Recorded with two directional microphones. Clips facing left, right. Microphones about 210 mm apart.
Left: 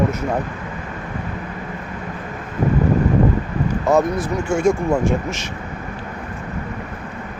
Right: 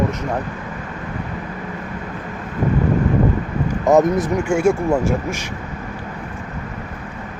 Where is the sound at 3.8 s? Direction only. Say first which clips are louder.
Right 4 dB; 20° right (ahead or behind).